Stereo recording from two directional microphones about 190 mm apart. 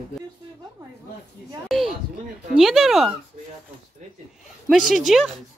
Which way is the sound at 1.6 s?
Centre (ahead or behind).